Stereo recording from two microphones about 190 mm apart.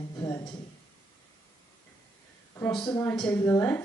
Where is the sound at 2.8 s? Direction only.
20° left (ahead or behind).